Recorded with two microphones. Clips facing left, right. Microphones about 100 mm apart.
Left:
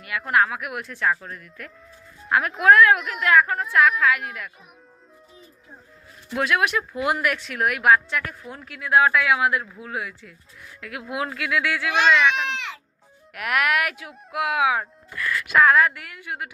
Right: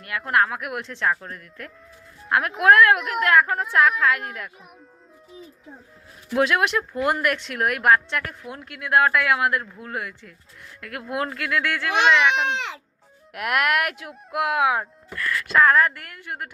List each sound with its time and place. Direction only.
0.0 s a woman's voice: centre (ahead or behind)
6.3 s a woman's voice: centre (ahead or behind)
12.3 s speech: 25° right (ahead or behind)
13.3 s a woman's voice: centre (ahead or behind)